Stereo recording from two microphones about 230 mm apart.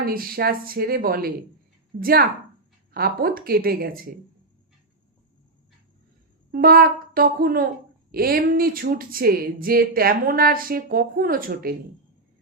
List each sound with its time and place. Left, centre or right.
0.0 s speech: right
6.5 s speech: right